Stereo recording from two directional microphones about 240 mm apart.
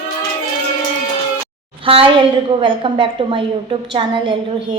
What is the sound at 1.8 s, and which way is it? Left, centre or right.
A woman's voice, right.